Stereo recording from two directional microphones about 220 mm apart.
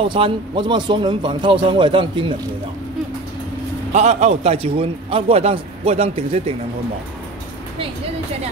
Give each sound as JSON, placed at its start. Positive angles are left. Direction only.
{"t": 0.0, "sound": "a man's voice", "side_deg": -20}
{"t": 3.9, "sound": "a man's voice", "side_deg": -30}